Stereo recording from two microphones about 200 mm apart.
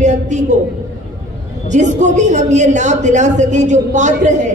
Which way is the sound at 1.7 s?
35° right (ahead or behind).